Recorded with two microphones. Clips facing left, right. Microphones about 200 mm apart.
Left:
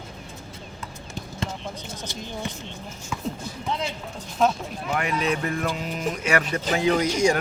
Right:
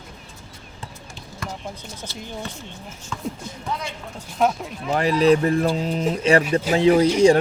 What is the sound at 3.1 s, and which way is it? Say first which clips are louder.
Speech: right 1 dB; 10° left (ahead or behind).